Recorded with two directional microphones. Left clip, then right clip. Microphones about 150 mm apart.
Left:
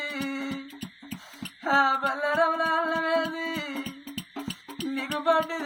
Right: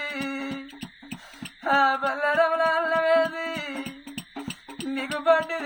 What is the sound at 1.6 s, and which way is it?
Music, 20° right (ahead or behind).